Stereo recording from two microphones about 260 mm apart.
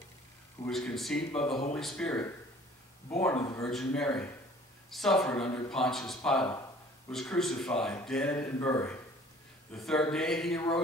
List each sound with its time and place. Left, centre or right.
0.7 s speech: centre
1.3 s speech: left
1.7 s speech: centre